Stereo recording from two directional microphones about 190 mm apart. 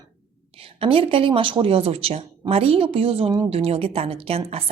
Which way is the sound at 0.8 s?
30° right (ahead or behind).